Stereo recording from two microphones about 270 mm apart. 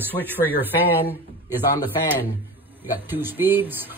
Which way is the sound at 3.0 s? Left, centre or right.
Centre.